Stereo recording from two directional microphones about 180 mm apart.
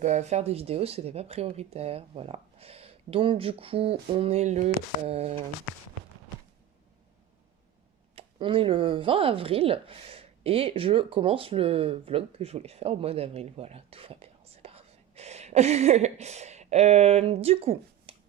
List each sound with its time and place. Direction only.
0.0 s speech: 40° right (ahead or behind)
8.1 s speech: 30° right (ahead or behind)